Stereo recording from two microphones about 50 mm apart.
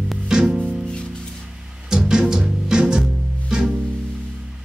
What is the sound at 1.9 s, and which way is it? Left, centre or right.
Music, centre.